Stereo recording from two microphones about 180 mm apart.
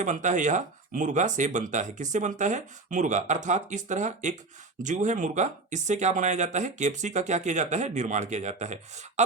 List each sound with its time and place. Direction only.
0.0 s speech: 45° right (ahead or behind)